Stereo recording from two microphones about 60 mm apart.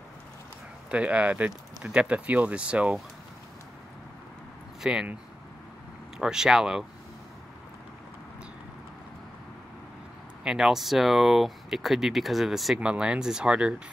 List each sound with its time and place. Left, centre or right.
0.8 s speech: right
4.8 s speech: centre
6.1 s speech: centre
10.4 s speech: centre
12.7 s speech: centre